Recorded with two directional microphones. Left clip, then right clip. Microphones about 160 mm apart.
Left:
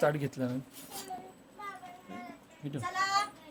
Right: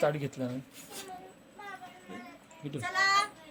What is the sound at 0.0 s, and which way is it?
Speech, 30° left (ahead or behind).